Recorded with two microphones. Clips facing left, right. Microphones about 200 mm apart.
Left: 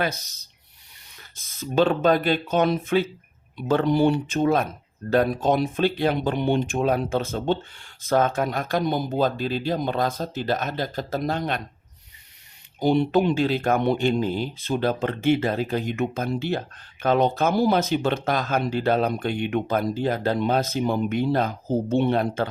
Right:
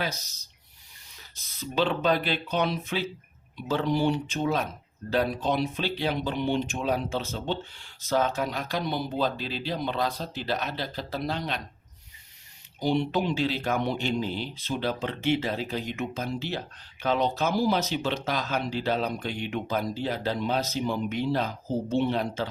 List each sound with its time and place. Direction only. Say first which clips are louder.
1.4 s speech: left 6 dB; 50° left (ahead or behind)
12.8 s speech: left 6 dB; 50° left (ahead or behind)